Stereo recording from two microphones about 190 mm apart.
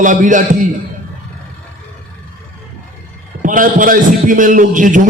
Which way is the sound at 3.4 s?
45° right (ahead or behind).